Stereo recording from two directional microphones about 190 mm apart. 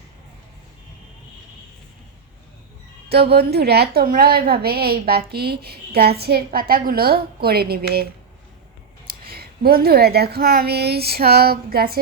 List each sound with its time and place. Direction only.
3.1 s a woman's voice: 60° right (ahead or behind)
9.2 s a woman's voice: 55° right (ahead or behind)